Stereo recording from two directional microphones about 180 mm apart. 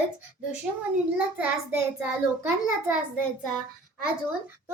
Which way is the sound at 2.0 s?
10° right (ahead or behind).